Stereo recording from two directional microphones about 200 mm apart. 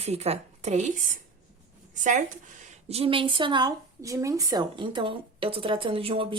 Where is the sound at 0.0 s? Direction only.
30° right (ahead or behind).